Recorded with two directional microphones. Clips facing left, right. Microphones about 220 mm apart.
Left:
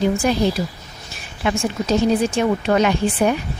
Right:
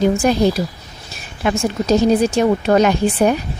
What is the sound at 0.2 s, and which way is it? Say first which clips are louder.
A woman's voice: right 3 dB; 45° right (ahead or behind).